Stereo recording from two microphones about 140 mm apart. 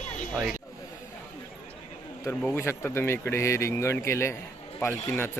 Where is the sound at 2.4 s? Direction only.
15° left (ahead or behind).